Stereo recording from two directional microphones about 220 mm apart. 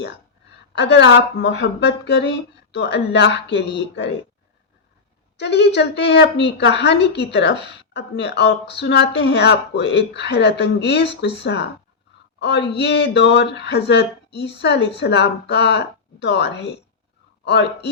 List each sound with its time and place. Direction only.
0.8 s a woman's voice: 50° left (ahead or behind)
5.4 s a woman's voice: 50° left (ahead or behind)
12.4 s a woman's voice: 50° left (ahead or behind)